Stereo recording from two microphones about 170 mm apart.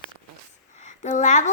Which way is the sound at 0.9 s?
45° left (ahead or behind).